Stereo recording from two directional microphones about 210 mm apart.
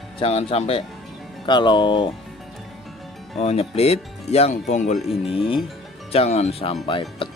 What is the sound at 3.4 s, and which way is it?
Speech, 30° left (ahead or behind).